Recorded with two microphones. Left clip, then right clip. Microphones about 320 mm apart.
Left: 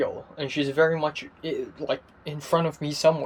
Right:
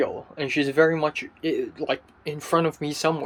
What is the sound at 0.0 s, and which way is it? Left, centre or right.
Speech, centre.